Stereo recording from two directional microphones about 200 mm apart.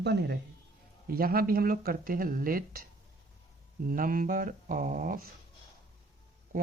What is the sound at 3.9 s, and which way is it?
Speech, 45° right (ahead or behind).